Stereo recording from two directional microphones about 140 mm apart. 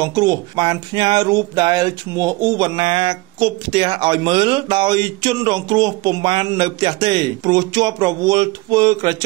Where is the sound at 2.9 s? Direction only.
40° right (ahead or behind).